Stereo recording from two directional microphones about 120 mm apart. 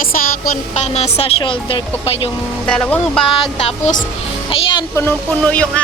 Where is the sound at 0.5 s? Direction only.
65° left (ahead or behind).